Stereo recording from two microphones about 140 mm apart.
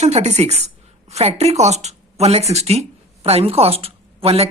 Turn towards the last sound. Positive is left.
turn(degrees=-45)  # may be behind; listen again after turning